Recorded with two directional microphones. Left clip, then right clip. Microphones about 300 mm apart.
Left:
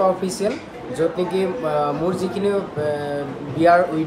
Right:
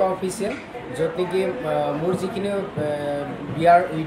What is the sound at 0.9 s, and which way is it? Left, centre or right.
Speech, centre.